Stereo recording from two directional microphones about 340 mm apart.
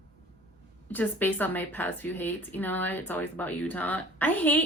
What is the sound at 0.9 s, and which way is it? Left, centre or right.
A woman's voice, centre.